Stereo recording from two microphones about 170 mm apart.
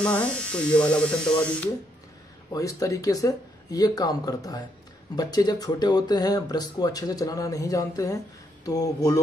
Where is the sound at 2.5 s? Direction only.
20° left (ahead or behind).